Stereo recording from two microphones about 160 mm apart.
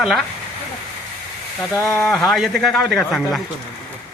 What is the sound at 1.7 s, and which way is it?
Speech, 20° left (ahead or behind).